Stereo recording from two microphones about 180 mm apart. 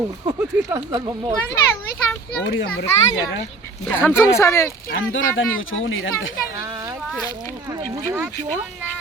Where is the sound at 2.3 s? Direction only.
75° left (ahead or behind).